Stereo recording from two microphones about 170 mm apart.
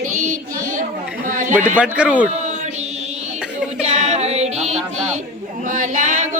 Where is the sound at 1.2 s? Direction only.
50° right (ahead or behind).